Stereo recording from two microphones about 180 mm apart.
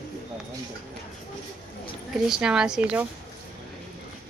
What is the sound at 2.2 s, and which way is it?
Speech, 5° right (ahead or behind).